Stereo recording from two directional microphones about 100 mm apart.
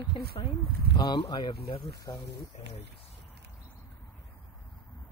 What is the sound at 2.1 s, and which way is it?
Speech, 45° left (ahead or behind).